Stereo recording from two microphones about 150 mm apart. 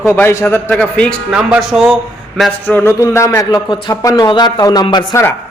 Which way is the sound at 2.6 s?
15° left (ahead or behind).